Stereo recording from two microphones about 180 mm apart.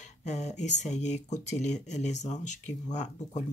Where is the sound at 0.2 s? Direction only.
40° left (ahead or behind).